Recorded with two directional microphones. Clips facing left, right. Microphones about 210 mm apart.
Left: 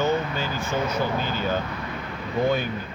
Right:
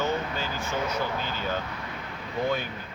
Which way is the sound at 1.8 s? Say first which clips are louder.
Left 5 dB; 65° left (ahead or behind).